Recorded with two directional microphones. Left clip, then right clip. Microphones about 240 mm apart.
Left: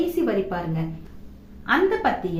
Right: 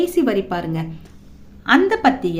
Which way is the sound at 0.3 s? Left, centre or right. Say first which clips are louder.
Right 4 dB; right.